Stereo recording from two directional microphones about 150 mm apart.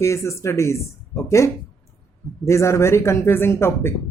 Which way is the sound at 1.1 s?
20° left (ahead or behind).